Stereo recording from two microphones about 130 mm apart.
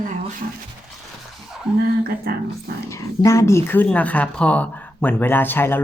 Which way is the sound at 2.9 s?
25° left (ahead or behind).